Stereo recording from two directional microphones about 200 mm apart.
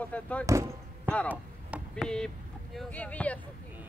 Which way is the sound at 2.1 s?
5° left (ahead or behind).